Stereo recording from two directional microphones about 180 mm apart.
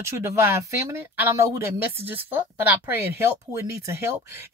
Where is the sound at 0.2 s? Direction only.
15° right (ahead or behind).